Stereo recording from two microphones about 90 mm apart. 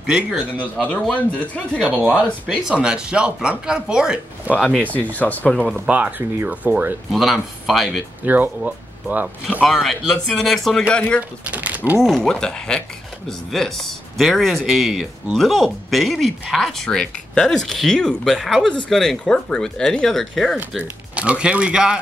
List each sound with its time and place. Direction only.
0.0 s speech: 10° right (ahead or behind)
0.6 s speech: 15° left (ahead or behind)
1.8 s speech: 15° right (ahead or behind)
4.6 s speech: 5° left (ahead or behind)
5.1 s speech: 20° left (ahead or behind)
5.9 s speech: 15° right (ahead or behind)
7.1 s speech: centre (ahead or behind)
8.3 s speech: 20° right (ahead or behind)
9.7 s speech: centre (ahead or behind)
10.9 s speech: 15° left (ahead or behind)
11.1 s speech: 15° right (ahead or behind)
12.0 s speech: 5° left (ahead or behind)
20.8 s speech: 15° right (ahead or behind)